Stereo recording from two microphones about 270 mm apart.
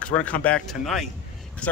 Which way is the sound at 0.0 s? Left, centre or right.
Centre.